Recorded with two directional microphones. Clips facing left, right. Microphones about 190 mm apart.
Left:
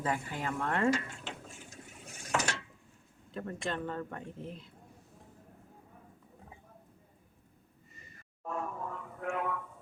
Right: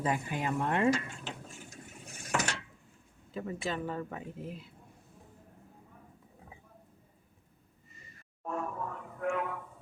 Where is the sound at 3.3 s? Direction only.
5° right (ahead or behind).